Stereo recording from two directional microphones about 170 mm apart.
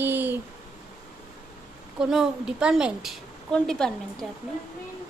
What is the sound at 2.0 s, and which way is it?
A woman's voice, 5° right (ahead or behind).